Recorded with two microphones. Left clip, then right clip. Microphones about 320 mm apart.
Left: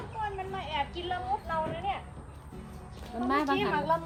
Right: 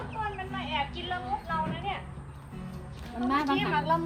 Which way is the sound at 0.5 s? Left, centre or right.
Left.